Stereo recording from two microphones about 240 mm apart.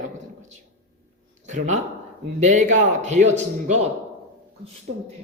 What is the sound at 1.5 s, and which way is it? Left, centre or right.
A man's voice, right.